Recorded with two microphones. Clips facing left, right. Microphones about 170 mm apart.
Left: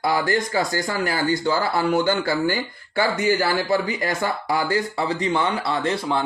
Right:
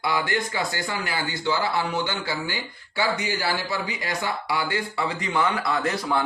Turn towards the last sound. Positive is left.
turn(degrees=30)  # may be behind; listen again after turning